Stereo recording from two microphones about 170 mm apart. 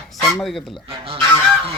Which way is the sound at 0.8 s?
35° right (ahead or behind).